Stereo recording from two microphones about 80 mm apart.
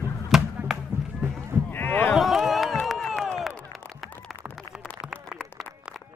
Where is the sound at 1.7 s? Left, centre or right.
Left.